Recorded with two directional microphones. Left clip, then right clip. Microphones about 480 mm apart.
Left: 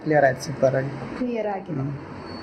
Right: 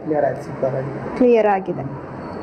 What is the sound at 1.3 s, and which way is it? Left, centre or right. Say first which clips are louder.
Speech: right 13 dB; centre.